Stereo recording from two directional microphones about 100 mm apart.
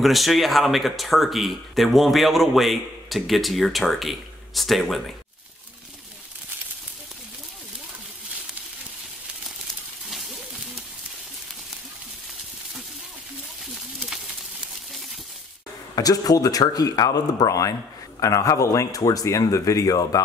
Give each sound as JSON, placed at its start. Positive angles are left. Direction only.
{"t": 0.0, "sound": "speech", "side_deg": 0}
{"t": 13.9, "sound": "a sound", "side_deg": -5}
{"t": 15.9, "sound": "speech", "side_deg": 40}